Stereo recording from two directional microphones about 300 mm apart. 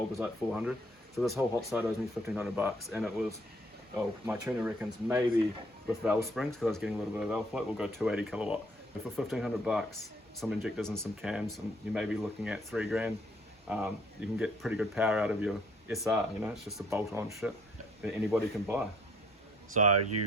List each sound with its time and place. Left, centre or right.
0.2 s speech: centre
19.8 s speech: right